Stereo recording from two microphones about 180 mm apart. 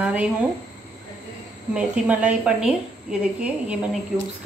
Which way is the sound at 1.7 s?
5° right (ahead or behind).